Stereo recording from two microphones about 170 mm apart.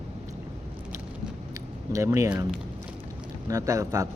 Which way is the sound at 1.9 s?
20° right (ahead or behind).